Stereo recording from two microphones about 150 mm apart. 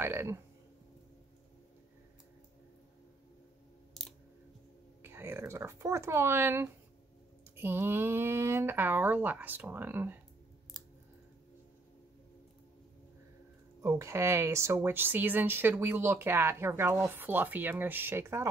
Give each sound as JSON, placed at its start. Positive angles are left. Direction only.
{"t": 0.0, "sound": "speech", "side_deg": -15}
{"t": 5.0, "sound": "speech", "side_deg": -15}
{"t": 13.7, "sound": "speech", "side_deg": -20}